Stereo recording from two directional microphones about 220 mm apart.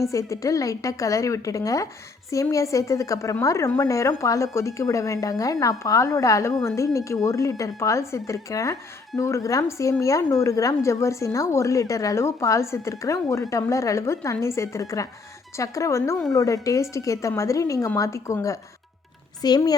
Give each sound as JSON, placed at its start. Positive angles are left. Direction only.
{"t": 0.1, "sound": "a woman's voice", "side_deg": 15}